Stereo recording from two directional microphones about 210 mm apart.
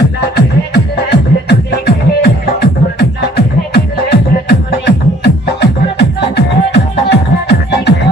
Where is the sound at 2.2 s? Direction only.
50° left (ahead or behind).